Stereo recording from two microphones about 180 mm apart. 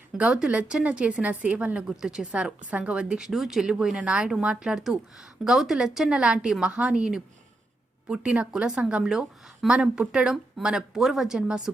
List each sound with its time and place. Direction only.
0.2 s a woman's voice: 5° right (ahead or behind)